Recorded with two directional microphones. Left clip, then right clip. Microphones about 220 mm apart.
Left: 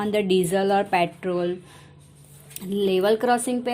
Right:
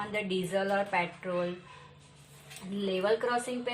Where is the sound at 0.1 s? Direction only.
55° left (ahead or behind).